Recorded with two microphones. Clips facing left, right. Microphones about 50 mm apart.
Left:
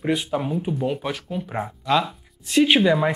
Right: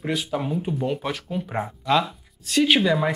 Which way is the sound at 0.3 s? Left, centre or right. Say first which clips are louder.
Left 1 dB; centre.